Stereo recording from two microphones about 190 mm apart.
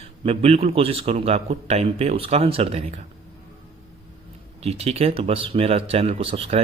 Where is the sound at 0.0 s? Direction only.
30° right (ahead or behind).